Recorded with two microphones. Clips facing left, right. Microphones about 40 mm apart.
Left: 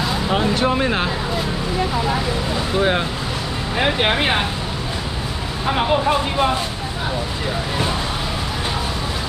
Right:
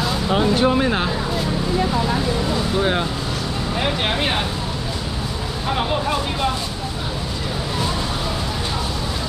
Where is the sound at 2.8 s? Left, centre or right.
Centre.